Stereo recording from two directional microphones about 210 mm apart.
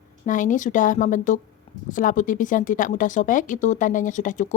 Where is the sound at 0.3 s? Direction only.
40° left (ahead or behind).